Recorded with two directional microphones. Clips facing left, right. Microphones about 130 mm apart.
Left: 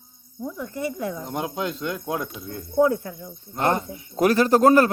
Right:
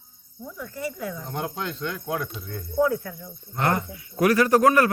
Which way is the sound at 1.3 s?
15° left (ahead or behind).